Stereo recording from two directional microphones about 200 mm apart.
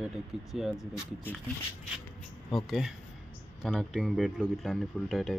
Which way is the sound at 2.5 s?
Centre (ahead or behind).